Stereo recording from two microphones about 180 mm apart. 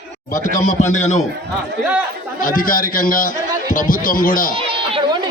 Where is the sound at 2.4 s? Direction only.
50° left (ahead or behind).